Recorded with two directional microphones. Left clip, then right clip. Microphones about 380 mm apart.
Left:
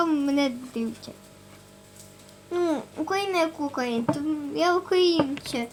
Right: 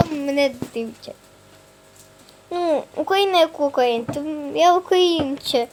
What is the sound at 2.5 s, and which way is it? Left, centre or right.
A child's voice, centre.